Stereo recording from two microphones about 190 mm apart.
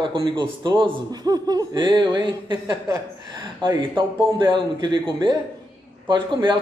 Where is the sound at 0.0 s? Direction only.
25° right (ahead or behind).